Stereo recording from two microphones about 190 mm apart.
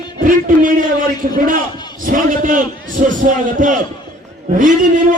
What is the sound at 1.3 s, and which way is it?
A man's voice, 45° right (ahead or behind).